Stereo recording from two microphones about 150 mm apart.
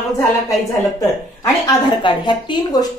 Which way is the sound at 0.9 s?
25° left (ahead or behind).